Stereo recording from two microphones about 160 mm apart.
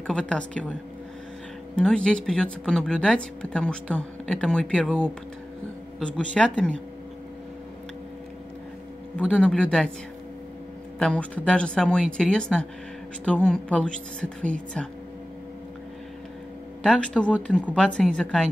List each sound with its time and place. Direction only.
0.0 s a woman's voice: 5° left (ahead or behind)
1.8 s speech: 5° left (ahead or behind)
5.9 s speech: 5° left (ahead or behind)
9.3 s a woman's voice: 5° left (ahead or behind)
11.0 s a woman's voice: 5° left (ahead or behind)
16.8 s speech: 5° left (ahead or behind)